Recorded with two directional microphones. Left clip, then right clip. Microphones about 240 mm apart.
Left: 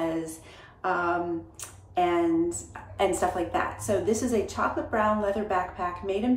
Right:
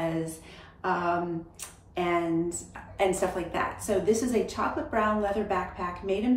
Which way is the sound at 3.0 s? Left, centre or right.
Centre.